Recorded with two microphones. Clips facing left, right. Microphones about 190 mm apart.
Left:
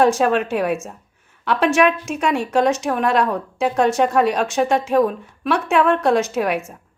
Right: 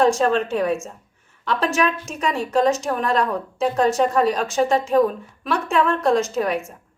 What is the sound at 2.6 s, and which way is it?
A woman's voice, centre (ahead or behind).